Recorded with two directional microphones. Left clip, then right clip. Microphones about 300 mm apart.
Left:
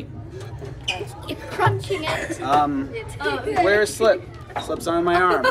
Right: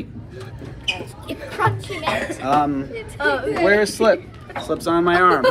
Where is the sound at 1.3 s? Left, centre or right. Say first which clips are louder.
Even; centre.